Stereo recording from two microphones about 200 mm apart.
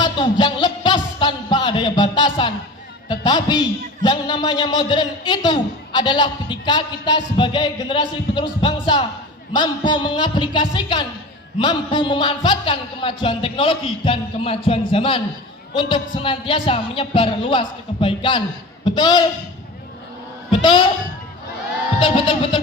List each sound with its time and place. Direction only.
0.0 s music: 20° left (ahead or behind)
3.1 s a man's voice: 20° left (ahead or behind)
20.5 s a man's voice: 25° left (ahead or behind)
21.9 s a man's voice: 25° left (ahead or behind)